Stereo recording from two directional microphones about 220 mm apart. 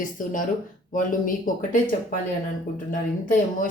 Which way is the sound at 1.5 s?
40° left (ahead or behind).